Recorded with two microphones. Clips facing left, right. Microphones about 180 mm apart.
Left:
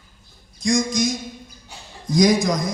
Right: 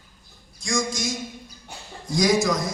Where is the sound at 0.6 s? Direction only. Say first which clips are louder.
Left 6 dB; 20° left (ahead or behind).